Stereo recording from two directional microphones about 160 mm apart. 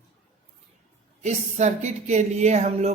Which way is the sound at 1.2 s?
45° right (ahead or behind).